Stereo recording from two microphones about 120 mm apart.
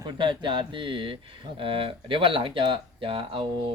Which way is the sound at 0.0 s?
40° right (ahead or behind).